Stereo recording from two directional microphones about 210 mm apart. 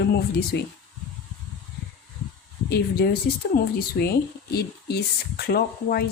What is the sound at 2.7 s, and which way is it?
Speech, 50° left (ahead or behind).